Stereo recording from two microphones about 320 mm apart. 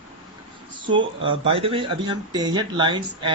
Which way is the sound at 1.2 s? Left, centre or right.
Centre.